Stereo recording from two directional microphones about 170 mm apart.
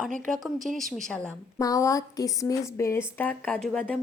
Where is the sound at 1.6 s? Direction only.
20° left (ahead or behind).